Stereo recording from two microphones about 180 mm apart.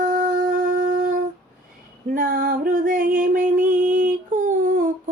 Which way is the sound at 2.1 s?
45° right (ahead or behind).